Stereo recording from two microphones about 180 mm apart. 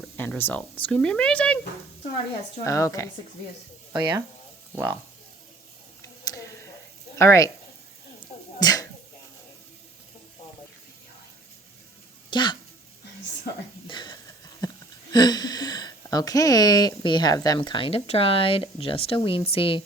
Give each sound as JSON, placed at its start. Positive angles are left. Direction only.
{"t": 0.2, "sound": "speech", "side_deg": 10}
{"t": 2.6, "sound": "a woman's voice", "side_deg": 15}
{"t": 3.9, "sound": "speech", "side_deg": -25}
{"t": 4.7, "sound": "speech", "side_deg": -10}
{"t": 6.2, "sound": "a sound", "side_deg": 20}
{"t": 7.2, "sound": "a woman's voice", "side_deg": 15}
{"t": 8.5, "sound": "a sound", "side_deg": 20}
{"t": 12.3, "sound": "speech", "side_deg": 25}
{"t": 13.8, "sound": "a sound", "side_deg": 25}
{"t": 15.1, "sound": "speech", "side_deg": 20}